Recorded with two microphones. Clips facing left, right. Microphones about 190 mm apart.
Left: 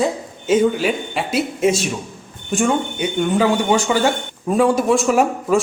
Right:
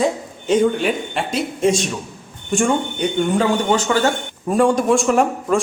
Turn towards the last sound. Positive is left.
turn(degrees=5)  # may be behind; listen again after turning